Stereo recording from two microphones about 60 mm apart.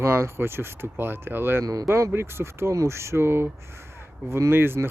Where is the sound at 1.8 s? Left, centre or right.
Right.